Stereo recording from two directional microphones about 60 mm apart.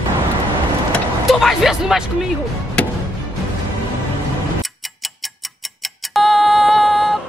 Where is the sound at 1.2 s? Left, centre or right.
Centre.